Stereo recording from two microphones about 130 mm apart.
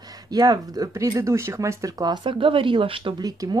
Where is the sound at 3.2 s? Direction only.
30° right (ahead or behind).